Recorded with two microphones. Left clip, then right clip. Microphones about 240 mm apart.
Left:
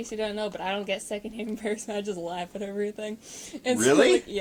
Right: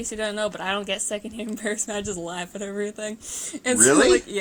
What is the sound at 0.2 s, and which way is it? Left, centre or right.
A woman's voice, right.